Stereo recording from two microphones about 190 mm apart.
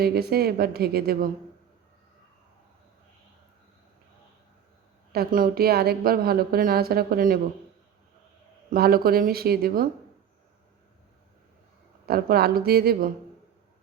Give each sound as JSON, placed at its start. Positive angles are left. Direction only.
{"t": 0.0, "sound": "a woman's voice", "side_deg": -55}
{"t": 5.1, "sound": "a woman's voice", "side_deg": -50}
{"t": 8.7, "sound": "a woman's voice", "side_deg": -50}
{"t": 12.0, "sound": "a woman's voice", "side_deg": -55}